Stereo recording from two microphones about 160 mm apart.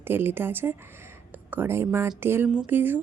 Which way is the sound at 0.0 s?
15° right (ahead or behind).